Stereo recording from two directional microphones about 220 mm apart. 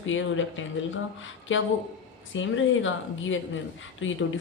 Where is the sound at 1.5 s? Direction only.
60° left (ahead or behind).